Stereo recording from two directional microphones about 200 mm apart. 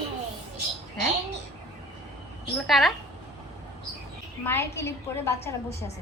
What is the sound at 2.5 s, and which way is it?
Speech, centre (ahead or behind).